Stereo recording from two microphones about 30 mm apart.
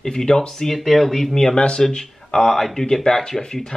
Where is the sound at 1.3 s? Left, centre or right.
Centre.